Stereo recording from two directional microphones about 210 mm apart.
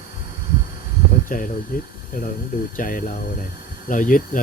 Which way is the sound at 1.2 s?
40° left (ahead or behind).